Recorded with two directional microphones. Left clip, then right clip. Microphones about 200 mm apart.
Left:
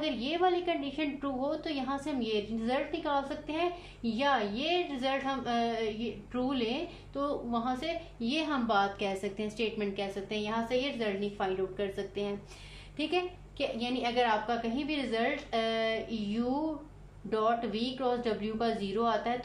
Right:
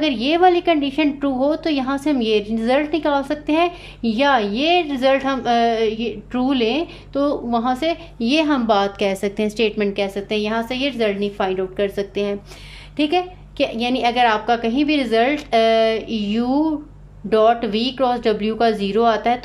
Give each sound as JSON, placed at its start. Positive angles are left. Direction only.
{"t": 0.0, "sound": "a woman's voice", "side_deg": -50}